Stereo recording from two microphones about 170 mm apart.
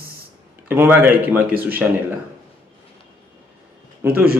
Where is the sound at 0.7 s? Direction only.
10° right (ahead or behind).